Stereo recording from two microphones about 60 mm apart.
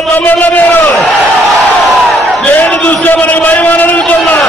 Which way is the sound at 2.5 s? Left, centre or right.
Left.